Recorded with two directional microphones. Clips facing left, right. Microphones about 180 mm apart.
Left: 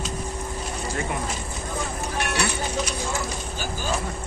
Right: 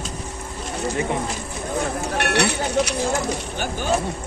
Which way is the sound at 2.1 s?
70° right (ahead or behind).